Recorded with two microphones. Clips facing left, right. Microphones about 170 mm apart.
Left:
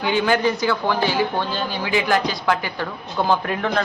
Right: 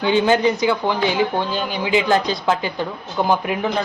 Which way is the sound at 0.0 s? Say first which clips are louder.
Right 3 dB; 20° right (ahead or behind).